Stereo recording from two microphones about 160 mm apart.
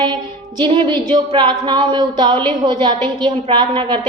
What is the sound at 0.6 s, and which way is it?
A woman's voice, 30° right (ahead or behind).